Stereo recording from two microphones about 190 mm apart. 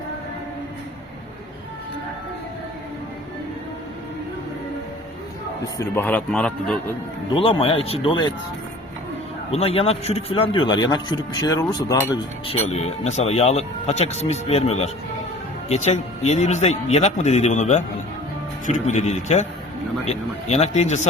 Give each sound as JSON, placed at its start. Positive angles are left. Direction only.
{"t": 5.7, "sound": "a man's voice", "side_deg": 15}
{"t": 7.3, "sound": "speech", "side_deg": 25}
{"t": 9.5, "sound": "speech", "side_deg": 30}
{"t": 12.5, "sound": "speech", "side_deg": 35}